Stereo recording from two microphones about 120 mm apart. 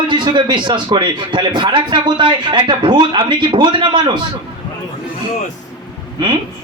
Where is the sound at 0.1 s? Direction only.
40° right (ahead or behind).